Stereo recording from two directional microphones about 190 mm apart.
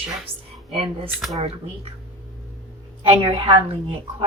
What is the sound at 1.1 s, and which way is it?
Speech, 5° right (ahead or behind).